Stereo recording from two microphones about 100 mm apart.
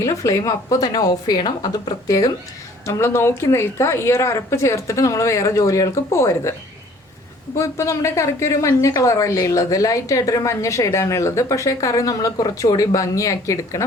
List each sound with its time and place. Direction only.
0.0 s a woman's voice: 35° left (ahead or behind)
7.6 s a woman's voice: 30° left (ahead or behind)